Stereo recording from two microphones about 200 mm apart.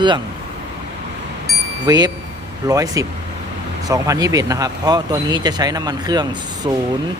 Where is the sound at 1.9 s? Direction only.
20° right (ahead or behind).